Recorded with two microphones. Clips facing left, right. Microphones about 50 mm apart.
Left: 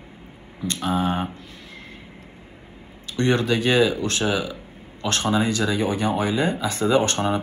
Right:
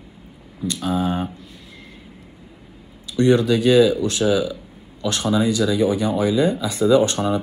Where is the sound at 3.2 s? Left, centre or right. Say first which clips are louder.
Right 5 dB; left.